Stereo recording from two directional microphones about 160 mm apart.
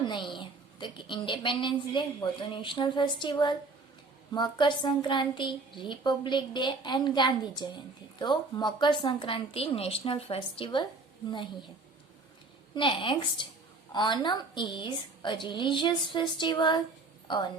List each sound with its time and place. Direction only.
0.0 s a sound: 30° left (ahead or behind)
0.3 s a woman's voice: 30° left (ahead or behind)
12.7 s a woman's voice: 30° left (ahead or behind)